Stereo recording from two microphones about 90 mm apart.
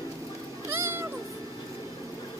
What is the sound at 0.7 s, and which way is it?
Cat, 25° right (ahead or behind).